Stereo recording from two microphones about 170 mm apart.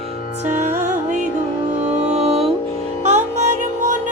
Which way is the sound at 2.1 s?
40° right (ahead or behind).